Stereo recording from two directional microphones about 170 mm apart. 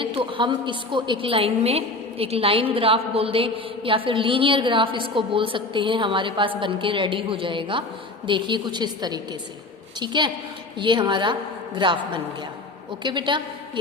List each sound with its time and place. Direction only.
0.0 s a woman's voice: 30° right (ahead or behind)